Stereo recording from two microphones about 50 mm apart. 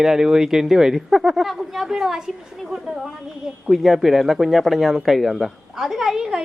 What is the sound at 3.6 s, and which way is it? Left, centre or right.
Speech, centre.